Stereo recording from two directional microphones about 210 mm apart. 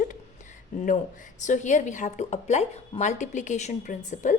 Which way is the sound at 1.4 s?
35° left (ahead or behind).